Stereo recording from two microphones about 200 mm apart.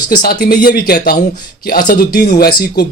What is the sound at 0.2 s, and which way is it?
Speech, 50° left (ahead or behind).